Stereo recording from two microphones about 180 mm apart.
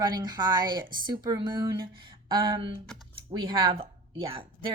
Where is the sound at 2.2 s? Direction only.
25° right (ahead or behind).